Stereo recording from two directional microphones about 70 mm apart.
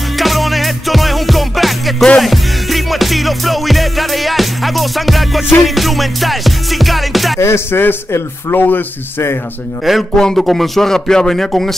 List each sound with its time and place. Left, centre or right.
0.2 s music: centre
7.3 s a man's voice: left
9.8 s music: centre